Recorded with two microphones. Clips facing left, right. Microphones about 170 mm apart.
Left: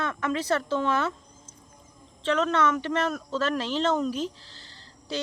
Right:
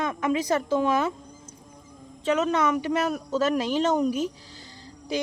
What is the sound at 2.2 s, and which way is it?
Speech, 10° right (ahead or behind).